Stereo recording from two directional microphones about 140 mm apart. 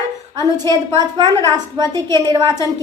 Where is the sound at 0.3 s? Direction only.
30° right (ahead or behind).